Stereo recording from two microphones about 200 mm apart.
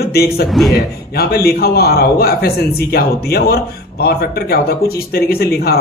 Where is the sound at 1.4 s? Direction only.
50° left (ahead or behind).